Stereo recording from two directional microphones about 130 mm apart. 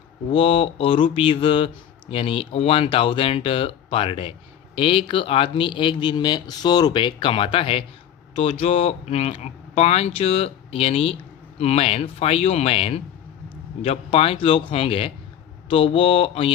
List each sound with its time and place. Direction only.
0.3 s speech: 45° left (ahead or behind)